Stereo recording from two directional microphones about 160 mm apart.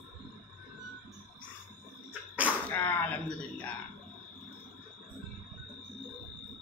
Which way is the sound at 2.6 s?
10° left (ahead or behind).